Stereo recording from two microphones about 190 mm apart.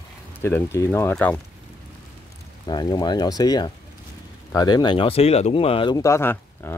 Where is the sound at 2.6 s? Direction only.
20° left (ahead or behind).